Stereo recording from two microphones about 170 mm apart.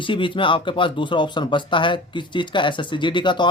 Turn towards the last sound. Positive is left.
turn(degrees=25)  # may be behind; listen again after turning